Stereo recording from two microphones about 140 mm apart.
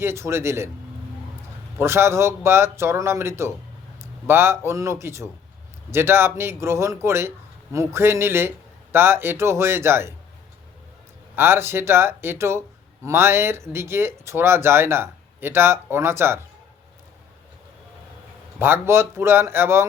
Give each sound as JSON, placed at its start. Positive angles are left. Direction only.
{"t": 0.0, "sound": "speech", "side_deg": -20}
{"t": 1.8, "sound": "speech", "side_deg": -20}
{"t": 11.3, "sound": "speech", "side_deg": -15}
{"t": 18.6, "sound": "speech", "side_deg": -15}